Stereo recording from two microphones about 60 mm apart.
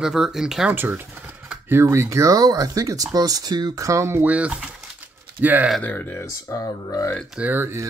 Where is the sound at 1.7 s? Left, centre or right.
Right.